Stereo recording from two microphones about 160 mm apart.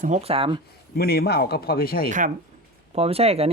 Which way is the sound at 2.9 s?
40° right (ahead or behind).